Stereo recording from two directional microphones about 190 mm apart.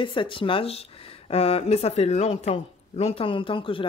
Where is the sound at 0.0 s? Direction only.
25° left (ahead or behind).